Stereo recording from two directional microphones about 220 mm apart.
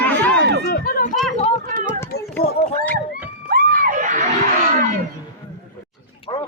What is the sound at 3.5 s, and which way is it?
Crowd, 35° right (ahead or behind).